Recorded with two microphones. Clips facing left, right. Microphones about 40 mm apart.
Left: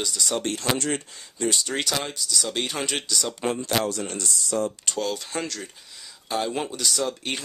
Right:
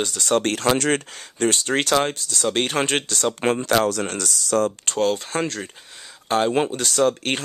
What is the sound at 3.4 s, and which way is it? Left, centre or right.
Speech, right.